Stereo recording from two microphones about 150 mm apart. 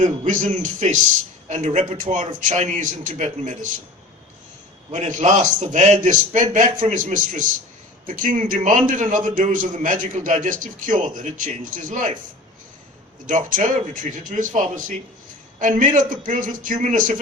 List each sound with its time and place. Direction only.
0.0 s a man's voice: 55° right (ahead or behind)
4.9 s a man's voice: 55° right (ahead or behind)
13.2 s a man's voice: 60° right (ahead or behind)